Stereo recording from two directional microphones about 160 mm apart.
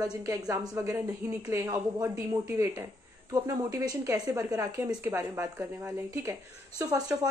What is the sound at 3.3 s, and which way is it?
Speech, 25° right (ahead or behind).